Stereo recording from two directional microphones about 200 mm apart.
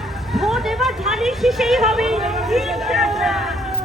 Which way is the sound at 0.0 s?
Centre (ahead or behind).